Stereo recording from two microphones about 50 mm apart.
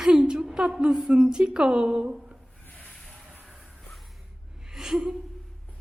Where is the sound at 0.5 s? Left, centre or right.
Centre.